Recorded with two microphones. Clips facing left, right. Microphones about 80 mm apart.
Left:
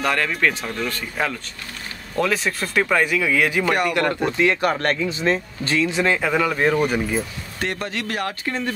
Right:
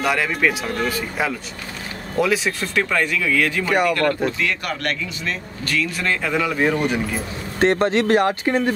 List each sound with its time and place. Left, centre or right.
0.0 s speech: centre
3.9 s speech: centre
6.0 s speech: centre
7.5 s speech: right